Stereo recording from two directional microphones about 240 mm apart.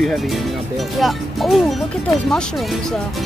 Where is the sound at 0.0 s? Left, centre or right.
Centre.